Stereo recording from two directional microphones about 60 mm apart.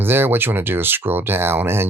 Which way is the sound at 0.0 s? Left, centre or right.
Right.